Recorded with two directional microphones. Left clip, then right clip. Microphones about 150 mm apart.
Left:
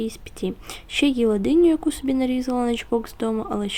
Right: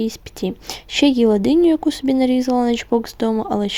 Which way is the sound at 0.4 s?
40° right (ahead or behind).